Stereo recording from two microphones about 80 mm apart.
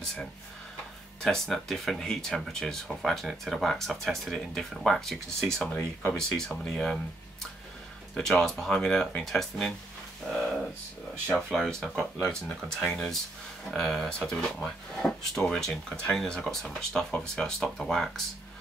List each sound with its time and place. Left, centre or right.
0.0 s speech: centre
5.7 s speech: centre
6.1 s speech: centre
8.1 s speech: centre
10.3 s a sound: centre
11.2 s speech: centre